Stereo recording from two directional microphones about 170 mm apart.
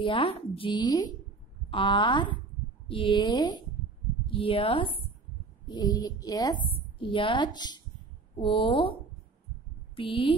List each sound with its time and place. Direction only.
0.0 s speech: 30° left (ahead or behind)
9.9 s speech: 30° left (ahead or behind)